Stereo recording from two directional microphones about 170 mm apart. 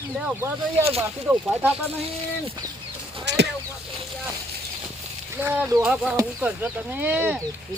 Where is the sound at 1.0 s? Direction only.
10° right (ahead or behind).